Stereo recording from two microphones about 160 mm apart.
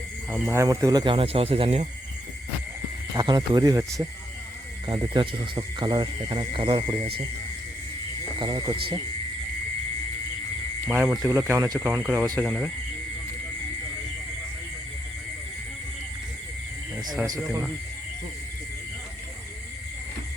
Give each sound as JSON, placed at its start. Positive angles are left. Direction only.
{"t": 0.4, "sound": "speech", "side_deg": -15}
{"t": 3.2, "sound": "speech", "side_deg": -25}
{"t": 8.4, "sound": "speech", "side_deg": -30}
{"t": 10.8, "sound": "speech", "side_deg": -5}
{"t": 11.3, "sound": "speech", "side_deg": -15}
{"t": 12.5, "sound": "speech", "side_deg": 0}
{"t": 17.2, "sound": "speech", "side_deg": -20}